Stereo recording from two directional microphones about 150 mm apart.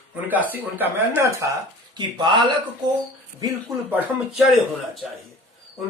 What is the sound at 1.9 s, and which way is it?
Speech, 30° right (ahead or behind).